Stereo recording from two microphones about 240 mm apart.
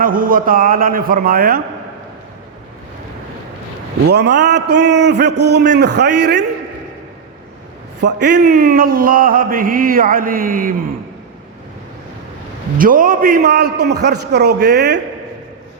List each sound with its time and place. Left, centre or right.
0.0 s music: right
4.1 s a man's voice: right
8.0 s music: right
12.8 s music: right
13.8 s a man's voice: right